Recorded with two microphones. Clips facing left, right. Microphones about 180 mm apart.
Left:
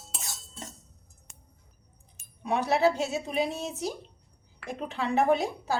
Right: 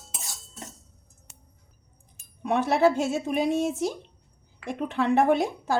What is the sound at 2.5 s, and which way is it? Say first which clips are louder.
A woman's voice: right 3 dB; 50° right (ahead or behind).